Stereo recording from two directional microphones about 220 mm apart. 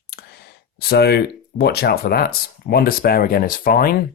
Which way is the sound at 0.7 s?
45° left (ahead or behind).